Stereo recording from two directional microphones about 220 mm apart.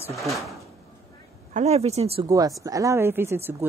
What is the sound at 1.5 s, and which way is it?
Speech, 30° right (ahead or behind).